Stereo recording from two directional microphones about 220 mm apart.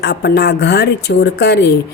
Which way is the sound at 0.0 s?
50° left (ahead or behind).